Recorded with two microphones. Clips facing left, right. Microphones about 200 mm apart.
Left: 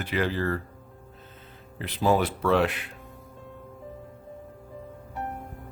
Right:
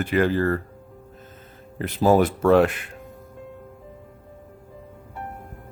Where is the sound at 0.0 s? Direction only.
50° right (ahead or behind).